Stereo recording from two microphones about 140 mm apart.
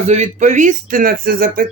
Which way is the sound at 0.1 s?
55° right (ahead or behind).